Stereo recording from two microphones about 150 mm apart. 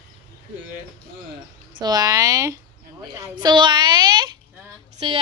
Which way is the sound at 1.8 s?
25° right (ahead or behind).